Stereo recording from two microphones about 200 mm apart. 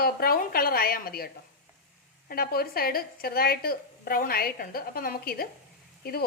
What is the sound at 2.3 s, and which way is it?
A woman's voice, 50° left (ahead or behind).